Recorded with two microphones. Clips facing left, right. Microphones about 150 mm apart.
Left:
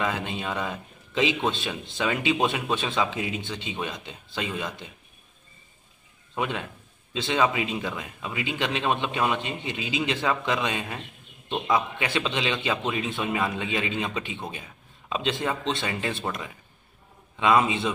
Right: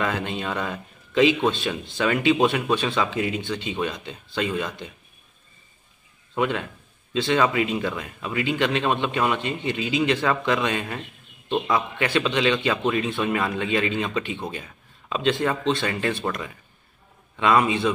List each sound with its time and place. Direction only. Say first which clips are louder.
0.0 s speech: right 2 dB; 15° left (ahead or behind)
6.3 s a man's voice: right 5 dB; 15° left (ahead or behind)